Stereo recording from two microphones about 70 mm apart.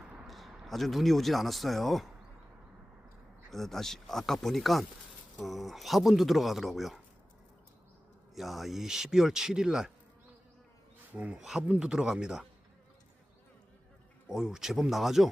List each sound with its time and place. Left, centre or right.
0.3 s speech: centre
3.5 s speech: centre
8.4 s speech: centre
11.1 s speech: centre
11.3 s speech: centre
11.6 s speech: right
11.9 s speech: centre
14.3 s speech: centre